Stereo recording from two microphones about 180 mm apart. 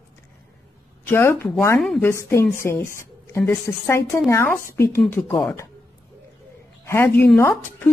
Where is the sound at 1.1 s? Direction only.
10° left (ahead or behind).